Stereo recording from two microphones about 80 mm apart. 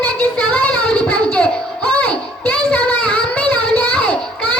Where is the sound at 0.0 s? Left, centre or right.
Centre.